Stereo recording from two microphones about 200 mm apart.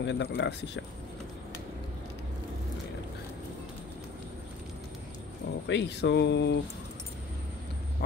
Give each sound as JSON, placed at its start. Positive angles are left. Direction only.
{"t": 0.0, "sound": "speech", "side_deg": 60}
{"t": 5.7, "sound": "speech", "side_deg": 60}